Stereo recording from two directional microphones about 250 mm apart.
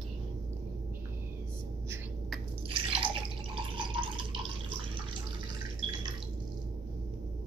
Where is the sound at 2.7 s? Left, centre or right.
Right.